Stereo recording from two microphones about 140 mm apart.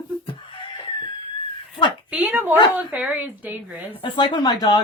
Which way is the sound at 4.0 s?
35° left (ahead or behind).